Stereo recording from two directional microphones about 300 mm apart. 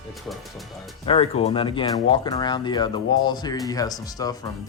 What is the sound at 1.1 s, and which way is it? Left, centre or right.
Speech, centre.